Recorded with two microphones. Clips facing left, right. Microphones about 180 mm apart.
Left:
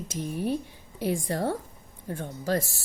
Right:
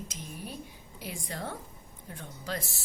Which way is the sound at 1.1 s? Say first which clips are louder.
Left 10 dB; 45° left (ahead or behind).